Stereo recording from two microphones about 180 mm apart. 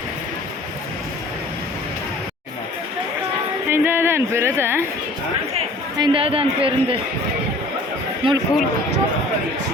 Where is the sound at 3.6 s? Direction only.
10° right (ahead or behind).